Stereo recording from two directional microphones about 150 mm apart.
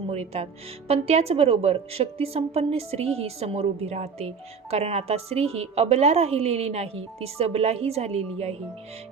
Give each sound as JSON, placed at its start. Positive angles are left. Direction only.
{"t": 0.1, "sound": "a woman's voice", "side_deg": -45}